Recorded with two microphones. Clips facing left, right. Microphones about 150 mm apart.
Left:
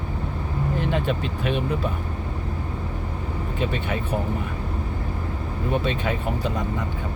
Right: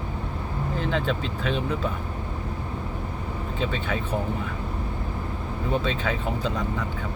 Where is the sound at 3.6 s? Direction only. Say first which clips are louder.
Left 1 dB; 10° left (ahead or behind).